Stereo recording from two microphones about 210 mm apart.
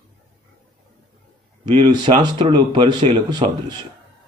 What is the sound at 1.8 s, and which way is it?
Speech, 20° right (ahead or behind).